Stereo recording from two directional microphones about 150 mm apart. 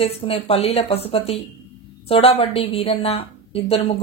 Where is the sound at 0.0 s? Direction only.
40° left (ahead or behind).